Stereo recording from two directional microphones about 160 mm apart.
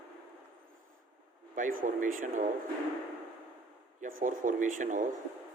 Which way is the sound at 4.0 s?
60° right (ahead or behind).